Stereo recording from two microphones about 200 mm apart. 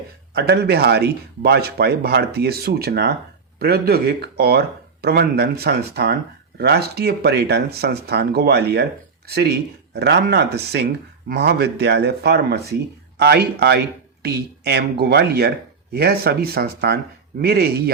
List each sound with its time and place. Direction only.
0.3 s speech: 55° right (ahead or behind)